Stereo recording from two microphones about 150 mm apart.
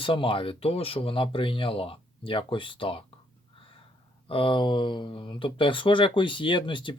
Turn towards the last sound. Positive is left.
turn(degrees=30)  # may be behind; listen again after turning